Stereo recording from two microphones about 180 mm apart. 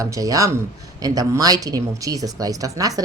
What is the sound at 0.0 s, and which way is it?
Speech, 20° right (ahead or behind).